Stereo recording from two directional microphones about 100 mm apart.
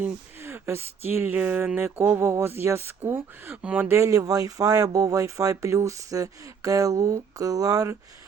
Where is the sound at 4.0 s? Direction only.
35° right (ahead or behind).